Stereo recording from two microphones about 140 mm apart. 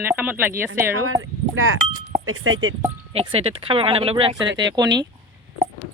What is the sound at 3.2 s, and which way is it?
Speech, 45° right (ahead or behind).